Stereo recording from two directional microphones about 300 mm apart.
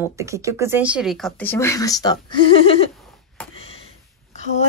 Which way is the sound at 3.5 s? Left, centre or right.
Centre.